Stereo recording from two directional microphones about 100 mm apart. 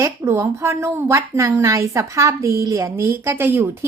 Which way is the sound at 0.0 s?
30° right (ahead or behind).